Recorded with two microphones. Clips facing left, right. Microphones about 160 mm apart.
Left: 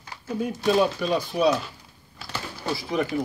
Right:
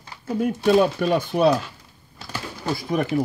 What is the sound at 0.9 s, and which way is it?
Speech, 55° right (ahead or behind).